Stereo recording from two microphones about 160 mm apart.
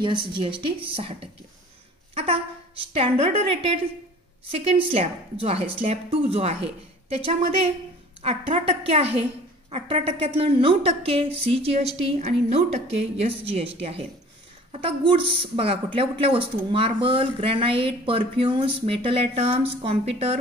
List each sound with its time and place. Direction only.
0.0 s a woman's voice: 30° right (ahead or behind)